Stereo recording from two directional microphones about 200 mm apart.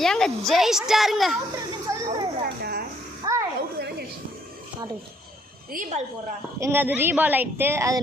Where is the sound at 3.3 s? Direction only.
15° right (ahead or behind).